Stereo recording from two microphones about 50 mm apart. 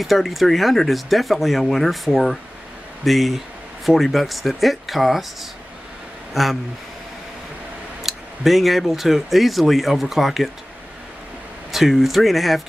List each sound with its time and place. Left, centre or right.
0.0 s speech: centre
6.3 s speech: centre
8.0 s speech: centre
11.7 s speech: centre